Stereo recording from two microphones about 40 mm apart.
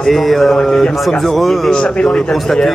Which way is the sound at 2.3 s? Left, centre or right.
Centre.